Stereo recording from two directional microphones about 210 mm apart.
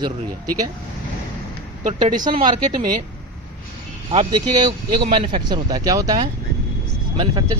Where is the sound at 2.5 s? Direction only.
20° right (ahead or behind).